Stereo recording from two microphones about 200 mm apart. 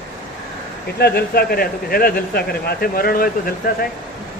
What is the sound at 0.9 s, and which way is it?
A man's voice, 55° left (ahead or behind).